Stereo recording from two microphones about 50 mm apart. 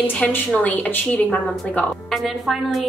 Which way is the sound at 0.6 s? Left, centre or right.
Left.